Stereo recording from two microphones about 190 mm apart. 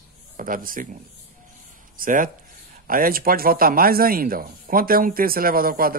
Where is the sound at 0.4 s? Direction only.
45° right (ahead or behind).